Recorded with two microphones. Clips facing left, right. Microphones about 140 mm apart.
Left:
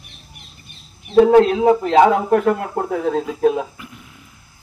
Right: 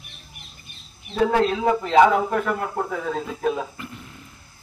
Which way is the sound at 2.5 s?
45° left (ahead or behind).